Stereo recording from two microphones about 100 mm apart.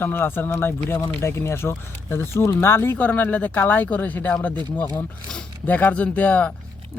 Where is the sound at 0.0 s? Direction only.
20° left (ahead or behind).